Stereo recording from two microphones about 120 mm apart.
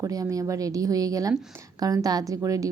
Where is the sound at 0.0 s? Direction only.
30° right (ahead or behind).